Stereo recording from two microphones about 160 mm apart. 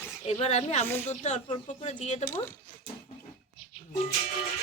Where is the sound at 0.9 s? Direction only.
15° left (ahead or behind).